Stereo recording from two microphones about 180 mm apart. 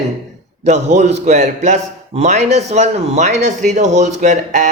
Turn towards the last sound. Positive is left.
turn(degrees=-45)  # may be behind; listen again after turning